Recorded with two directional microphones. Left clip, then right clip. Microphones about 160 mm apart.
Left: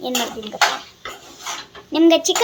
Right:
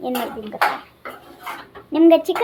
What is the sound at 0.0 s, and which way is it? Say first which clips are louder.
Speech: left 2 dB; centre (ahead or behind).